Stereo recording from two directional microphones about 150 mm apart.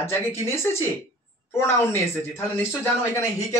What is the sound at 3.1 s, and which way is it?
Speech, 20° left (ahead or behind).